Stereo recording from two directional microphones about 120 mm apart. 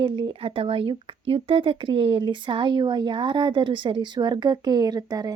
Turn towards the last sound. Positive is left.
turn(degrees=-30)  # may be behind; listen again after turning